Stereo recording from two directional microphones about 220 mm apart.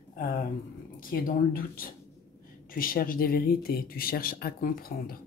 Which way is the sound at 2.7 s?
40° left (ahead or behind).